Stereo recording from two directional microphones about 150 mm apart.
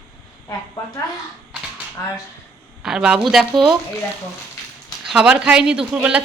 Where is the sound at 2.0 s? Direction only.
20° left (ahead or behind).